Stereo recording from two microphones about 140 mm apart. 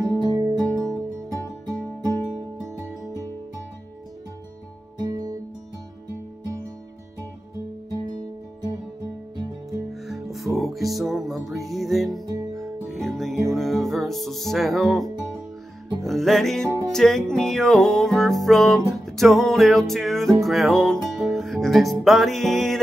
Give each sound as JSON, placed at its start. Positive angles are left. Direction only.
{"t": 0.0, "sound": "music", "side_deg": -25}
{"t": 10.0, "sound": "music", "side_deg": 0}